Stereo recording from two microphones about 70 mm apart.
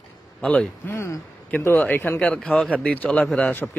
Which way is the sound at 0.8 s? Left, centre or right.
Left.